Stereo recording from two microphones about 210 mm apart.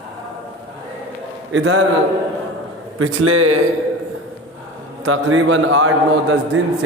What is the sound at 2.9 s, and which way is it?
Speech, 90° right.